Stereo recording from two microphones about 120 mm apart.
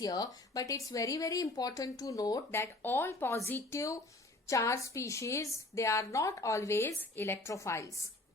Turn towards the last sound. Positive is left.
turn(degrees=25)  # may be behind; listen again after turning